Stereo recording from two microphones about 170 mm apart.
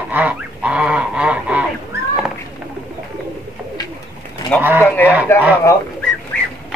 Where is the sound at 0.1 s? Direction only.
10° right (ahead or behind).